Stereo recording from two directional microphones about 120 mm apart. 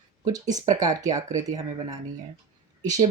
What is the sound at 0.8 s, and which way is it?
Speech, 30° right (ahead or behind).